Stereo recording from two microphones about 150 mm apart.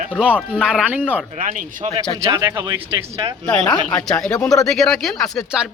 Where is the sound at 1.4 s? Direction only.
55° right (ahead or behind).